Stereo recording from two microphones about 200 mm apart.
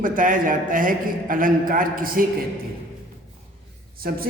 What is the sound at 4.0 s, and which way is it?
Speech, 45° right (ahead or behind).